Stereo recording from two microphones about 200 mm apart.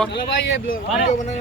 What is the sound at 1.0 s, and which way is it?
Speech, 35° left (ahead or behind).